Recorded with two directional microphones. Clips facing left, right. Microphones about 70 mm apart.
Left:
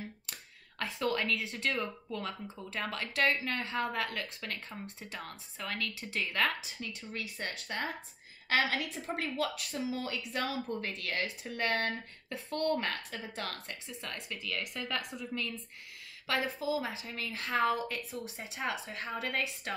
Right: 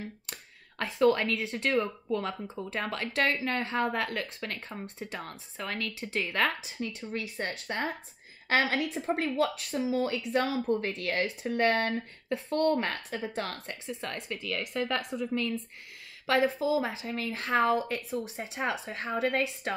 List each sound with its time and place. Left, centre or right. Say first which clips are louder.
0.7 s a woman's voice: right 8 dB; right